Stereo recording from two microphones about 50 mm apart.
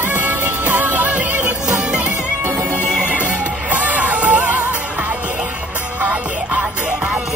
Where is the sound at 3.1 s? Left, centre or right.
Right.